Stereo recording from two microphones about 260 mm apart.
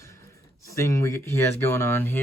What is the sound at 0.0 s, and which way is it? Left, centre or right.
Speech, centre.